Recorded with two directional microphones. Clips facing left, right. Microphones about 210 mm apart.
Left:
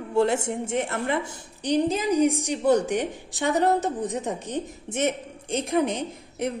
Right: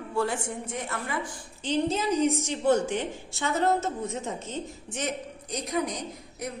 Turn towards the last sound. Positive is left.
turn(degrees=30)  # may be behind; listen again after turning